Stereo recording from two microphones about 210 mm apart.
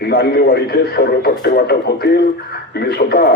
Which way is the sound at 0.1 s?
50° left (ahead or behind).